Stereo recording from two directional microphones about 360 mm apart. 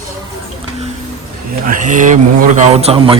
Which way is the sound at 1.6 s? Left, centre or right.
Right.